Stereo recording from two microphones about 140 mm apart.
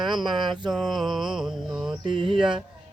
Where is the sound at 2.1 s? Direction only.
40° right (ahead or behind).